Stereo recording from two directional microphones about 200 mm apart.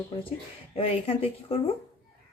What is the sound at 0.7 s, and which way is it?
Speech, 30° left (ahead or behind).